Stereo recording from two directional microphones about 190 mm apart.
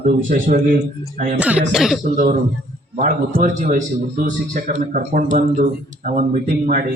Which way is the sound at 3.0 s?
45° right (ahead or behind).